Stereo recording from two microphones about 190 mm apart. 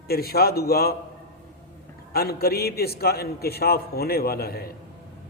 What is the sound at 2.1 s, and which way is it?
A man's voice, 55° left (ahead or behind).